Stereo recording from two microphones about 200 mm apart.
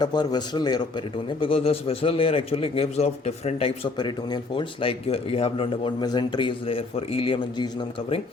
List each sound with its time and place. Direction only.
0.0 s a man's voice: 20° left (ahead or behind)